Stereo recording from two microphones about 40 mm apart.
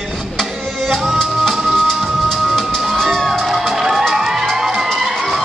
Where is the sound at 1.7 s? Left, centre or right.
Centre.